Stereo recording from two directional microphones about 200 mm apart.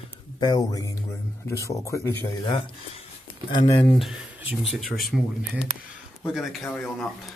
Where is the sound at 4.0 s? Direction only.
Centre (ahead or behind).